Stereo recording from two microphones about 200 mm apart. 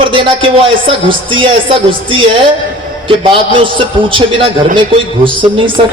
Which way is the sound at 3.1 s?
25° right (ahead or behind).